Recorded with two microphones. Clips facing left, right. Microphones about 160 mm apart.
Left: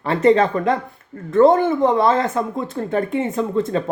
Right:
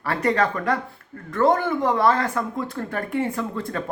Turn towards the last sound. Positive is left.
turn(degrees=25)  # may be behind; listen again after turning